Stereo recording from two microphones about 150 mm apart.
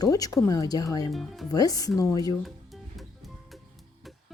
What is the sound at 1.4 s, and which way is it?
Speech, 25° left (ahead or behind).